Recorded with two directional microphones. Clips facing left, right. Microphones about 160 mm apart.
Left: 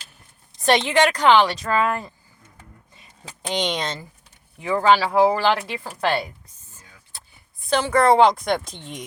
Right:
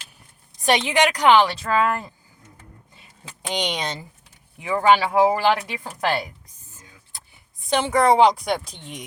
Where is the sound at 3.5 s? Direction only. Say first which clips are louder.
Left 2 dB; 15° right (ahead or behind).